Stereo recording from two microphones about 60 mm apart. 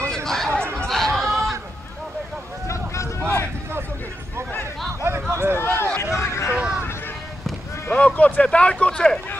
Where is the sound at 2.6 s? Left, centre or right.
Left.